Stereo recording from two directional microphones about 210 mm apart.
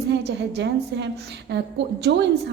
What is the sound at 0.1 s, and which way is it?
A woman's voice, 55° right (ahead or behind).